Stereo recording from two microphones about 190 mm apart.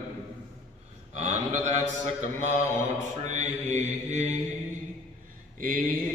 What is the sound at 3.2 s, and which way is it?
Mantra, 40° right (ahead or behind).